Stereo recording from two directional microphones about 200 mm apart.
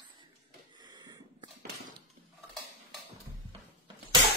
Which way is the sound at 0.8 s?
20° right (ahead or behind).